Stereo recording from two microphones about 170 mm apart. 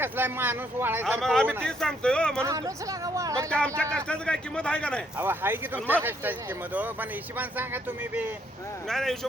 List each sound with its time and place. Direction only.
0.0 s speech: 10° right (ahead or behind)
1.2 s speech: 5° left (ahead or behind)
2.4 s speech: 20° right (ahead or behind)
3.8 s speech: 5° left (ahead or behind)
5.1 s speech: 10° right (ahead or behind)
8.9 s speech: centre (ahead or behind)